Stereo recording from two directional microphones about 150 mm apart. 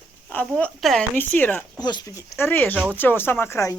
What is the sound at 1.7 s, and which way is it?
Speech, 25° left (ahead or behind).